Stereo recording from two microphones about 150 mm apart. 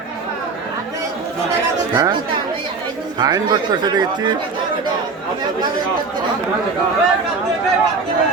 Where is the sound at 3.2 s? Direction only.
30° right (ahead or behind).